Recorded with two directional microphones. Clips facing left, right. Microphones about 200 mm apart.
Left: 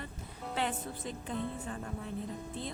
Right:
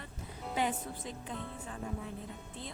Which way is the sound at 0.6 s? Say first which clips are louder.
Right 1 dB; 10° right (ahead or behind).